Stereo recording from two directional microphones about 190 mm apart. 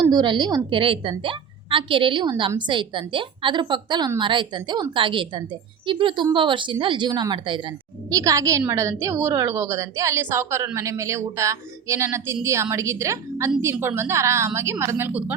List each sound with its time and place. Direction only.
0.1 s a woman's voice: 25° right (ahead or behind)